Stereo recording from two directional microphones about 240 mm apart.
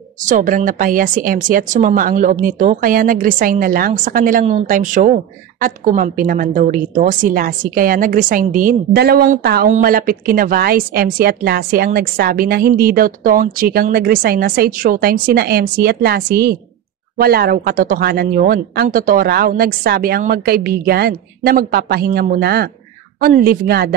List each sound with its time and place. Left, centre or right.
0.3 s speech: right